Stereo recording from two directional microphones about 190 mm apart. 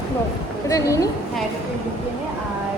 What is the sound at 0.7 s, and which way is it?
Speech, 15° left (ahead or behind).